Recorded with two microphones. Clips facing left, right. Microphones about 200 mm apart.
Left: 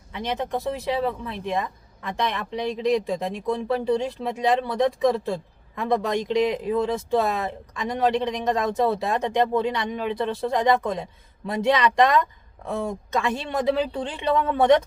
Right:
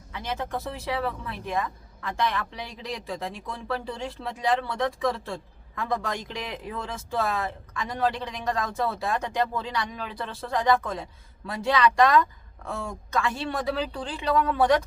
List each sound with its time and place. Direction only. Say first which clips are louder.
0.1 s speech: left 4 dB; 20° left (ahead or behind)